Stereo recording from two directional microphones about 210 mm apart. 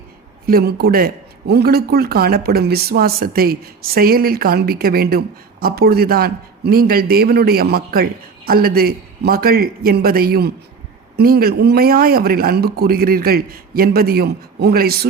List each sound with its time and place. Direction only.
0.4 s a man's voice: 45° right (ahead or behind)